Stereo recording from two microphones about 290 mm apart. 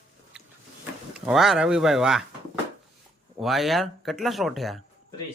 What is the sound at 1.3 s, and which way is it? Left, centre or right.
Speech, centre.